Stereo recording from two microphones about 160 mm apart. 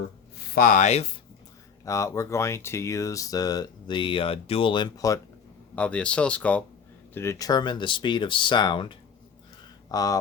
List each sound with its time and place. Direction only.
0.5 s speech: 60° left (ahead or behind); by 1.1 s 40° left (ahead or behind)
1.8 s speech: 20° left (ahead or behind)
5.7 s speech: 10° left (ahead or behind)